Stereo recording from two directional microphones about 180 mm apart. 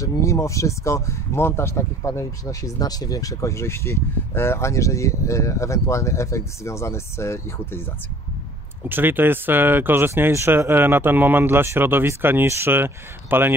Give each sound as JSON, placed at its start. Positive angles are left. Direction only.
{"t": 0.0, "sound": "speech", "side_deg": 15}
{"t": 8.8, "sound": "speech", "side_deg": -10}